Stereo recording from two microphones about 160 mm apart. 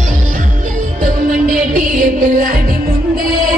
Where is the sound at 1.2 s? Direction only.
60° right (ahead or behind).